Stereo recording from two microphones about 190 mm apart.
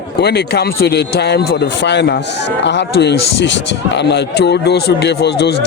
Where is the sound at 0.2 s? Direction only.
60° left (ahead or behind).